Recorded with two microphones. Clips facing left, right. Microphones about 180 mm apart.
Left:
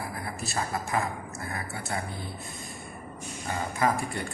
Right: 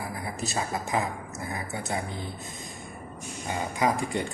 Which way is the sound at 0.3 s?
20° right (ahead or behind).